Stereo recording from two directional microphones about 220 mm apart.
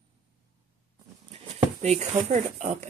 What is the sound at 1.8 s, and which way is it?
Speech, 30° right (ahead or behind).